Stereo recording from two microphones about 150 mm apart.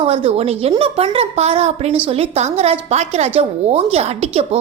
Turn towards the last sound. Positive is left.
turn(degrees=-40)  # may be behind; listen again after turning